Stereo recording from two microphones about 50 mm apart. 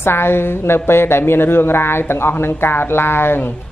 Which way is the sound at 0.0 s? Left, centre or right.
Left.